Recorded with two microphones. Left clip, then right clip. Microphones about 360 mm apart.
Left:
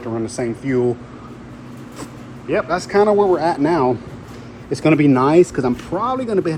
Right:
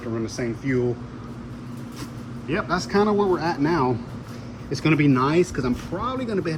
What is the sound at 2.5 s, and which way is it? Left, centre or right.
Speech, centre.